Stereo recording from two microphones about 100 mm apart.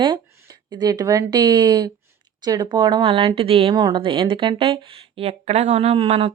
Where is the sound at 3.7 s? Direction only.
45° right (ahead or behind).